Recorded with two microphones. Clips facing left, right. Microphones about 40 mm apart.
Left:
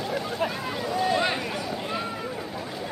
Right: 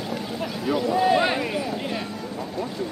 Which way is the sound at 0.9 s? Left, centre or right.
Centre.